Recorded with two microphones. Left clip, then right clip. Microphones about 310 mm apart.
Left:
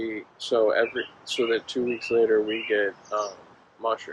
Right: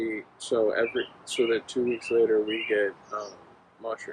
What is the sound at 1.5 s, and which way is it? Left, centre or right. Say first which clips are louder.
Speech: left 2 dB; centre.